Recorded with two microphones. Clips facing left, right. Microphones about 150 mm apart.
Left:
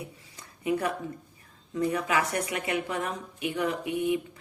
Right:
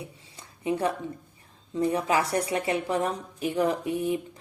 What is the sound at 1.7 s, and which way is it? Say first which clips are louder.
Speech: right 2 dB; 30° right (ahead or behind).